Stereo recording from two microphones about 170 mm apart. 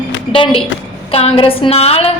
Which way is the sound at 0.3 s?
30° left (ahead or behind).